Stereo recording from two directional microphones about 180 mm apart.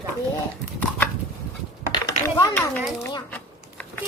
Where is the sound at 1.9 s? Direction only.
20° left (ahead or behind).